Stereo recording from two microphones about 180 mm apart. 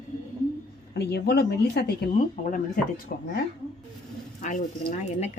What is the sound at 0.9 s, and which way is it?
Speech, 65° left (ahead or behind).